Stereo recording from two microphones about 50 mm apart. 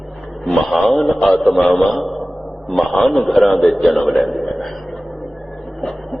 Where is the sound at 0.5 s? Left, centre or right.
Centre.